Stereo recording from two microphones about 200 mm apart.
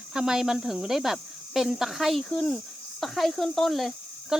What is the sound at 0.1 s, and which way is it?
Speech, 5° right (ahead or behind).